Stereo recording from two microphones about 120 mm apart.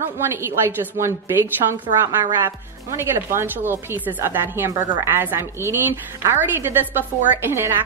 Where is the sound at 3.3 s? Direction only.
20° right (ahead or behind).